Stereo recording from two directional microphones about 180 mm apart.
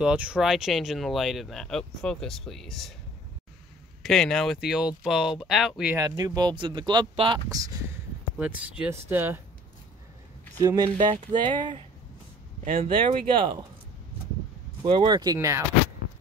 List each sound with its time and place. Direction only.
0.0 s speech: 5° right (ahead or behind)
4.0 s speech: centre (ahead or behind)
5.9 s speech: 20° right (ahead or behind)
8.4 s speech: 5° right (ahead or behind)
10.6 s speech: 20° right (ahead or behind)
12.8 s speech: 30° right (ahead or behind)
14.8 s speech: 25° right (ahead or behind)